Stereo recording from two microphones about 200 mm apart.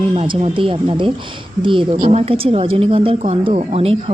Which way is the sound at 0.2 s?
30° right (ahead or behind).